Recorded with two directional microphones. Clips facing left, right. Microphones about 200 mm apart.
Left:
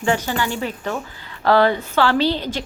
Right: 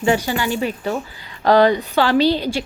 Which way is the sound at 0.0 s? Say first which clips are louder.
Right 2 dB; 15° right (ahead or behind).